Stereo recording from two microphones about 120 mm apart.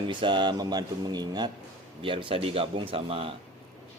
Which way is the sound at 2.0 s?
45° right (ahead or behind).